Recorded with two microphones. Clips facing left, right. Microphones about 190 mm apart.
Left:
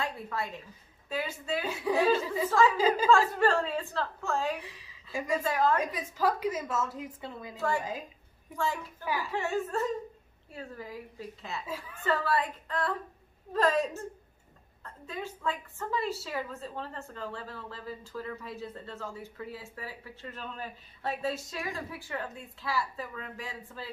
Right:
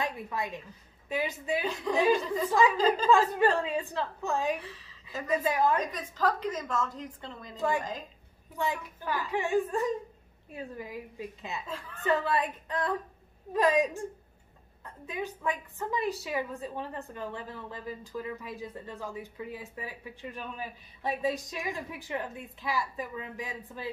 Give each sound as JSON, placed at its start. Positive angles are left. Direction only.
{"t": 0.0, "sound": "a woman's voice", "side_deg": -15}
{"t": 1.7, "sound": "a woman's voice", "side_deg": 10}
{"t": 2.0, "sound": "a woman's voice", "side_deg": -15}
{"t": 2.2, "sound": "a woman's voice", "side_deg": 5}
{"t": 3.1, "sound": "a woman's voice", "side_deg": -20}
{"t": 4.6, "sound": "a woman's voice", "side_deg": 15}
{"t": 5.4, "sound": "a woman's voice", "side_deg": -15}
{"t": 5.8, "sound": "a woman's voice", "side_deg": 10}
{"t": 7.5, "sound": "a woman's voice", "side_deg": -15}
{"t": 9.0, "sound": "a woman's voice", "side_deg": 10}
{"t": 9.3, "sound": "a woman's voice", "side_deg": -15}
{"t": 11.6, "sound": "a woman's voice", "side_deg": 10}
{"t": 12.0, "sound": "a woman's voice", "side_deg": -20}